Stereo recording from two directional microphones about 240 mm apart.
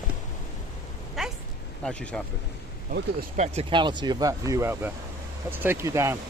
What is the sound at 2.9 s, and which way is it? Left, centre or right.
Speech, right.